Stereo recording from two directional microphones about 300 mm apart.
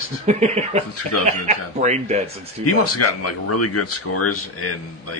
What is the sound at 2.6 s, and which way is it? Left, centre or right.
Speech, left.